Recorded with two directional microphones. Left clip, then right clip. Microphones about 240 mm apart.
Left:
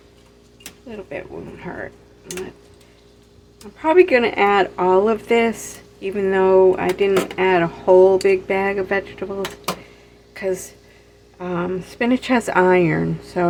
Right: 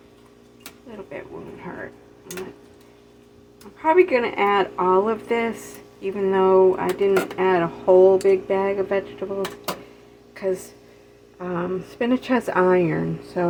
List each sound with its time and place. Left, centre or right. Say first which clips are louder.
3.8 s speech: left 3 dB; left
10.3 s a woman's voice: left 2 dB; centre